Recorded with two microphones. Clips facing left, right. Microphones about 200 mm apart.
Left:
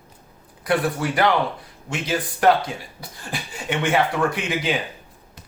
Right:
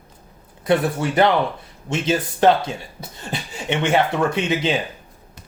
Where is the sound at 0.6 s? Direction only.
25° right (ahead or behind).